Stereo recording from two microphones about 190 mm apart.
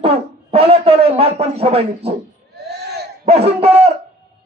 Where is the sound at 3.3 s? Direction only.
30° right (ahead or behind).